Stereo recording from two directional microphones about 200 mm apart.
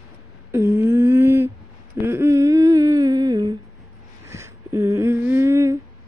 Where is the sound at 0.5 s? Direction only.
10° right (ahead or behind).